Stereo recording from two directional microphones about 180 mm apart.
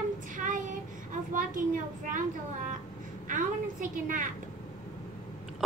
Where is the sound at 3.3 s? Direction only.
45° right (ahead or behind).